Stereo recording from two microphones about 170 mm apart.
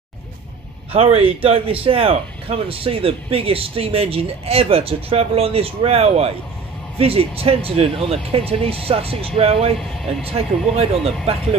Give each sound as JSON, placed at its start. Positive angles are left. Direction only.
{"t": 0.9, "sound": "speech", "side_deg": -35}